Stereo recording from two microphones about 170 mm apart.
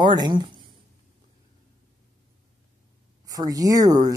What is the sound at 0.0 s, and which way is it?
Speech, 25° right (ahead or behind).